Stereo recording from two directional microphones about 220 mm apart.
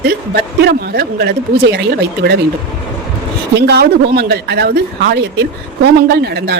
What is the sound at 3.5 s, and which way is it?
A woman's voice, 50° right (ahead or behind).